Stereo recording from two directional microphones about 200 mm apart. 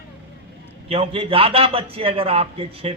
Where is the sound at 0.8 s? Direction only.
30° right (ahead or behind).